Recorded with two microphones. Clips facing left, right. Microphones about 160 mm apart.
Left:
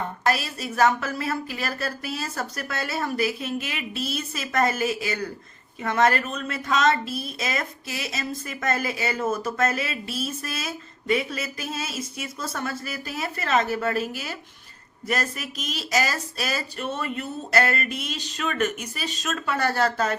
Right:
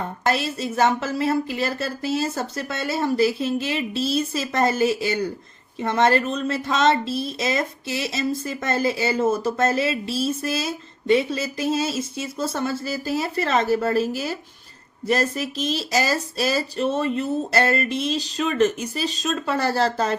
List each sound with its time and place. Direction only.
0.3 s speech: 25° right (ahead or behind)